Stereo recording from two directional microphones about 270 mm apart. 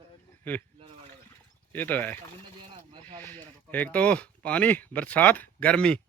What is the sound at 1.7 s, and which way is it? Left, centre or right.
Speech, centre.